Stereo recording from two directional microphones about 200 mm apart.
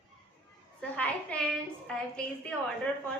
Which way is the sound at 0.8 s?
5° left (ahead or behind).